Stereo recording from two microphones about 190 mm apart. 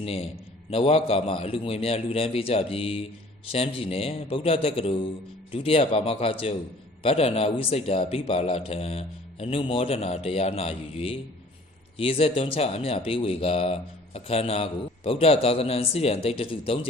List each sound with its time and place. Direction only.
0.0 s speech: 30° left (ahead or behind)